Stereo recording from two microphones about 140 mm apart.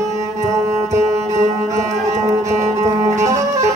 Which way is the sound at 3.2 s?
20° right (ahead or behind).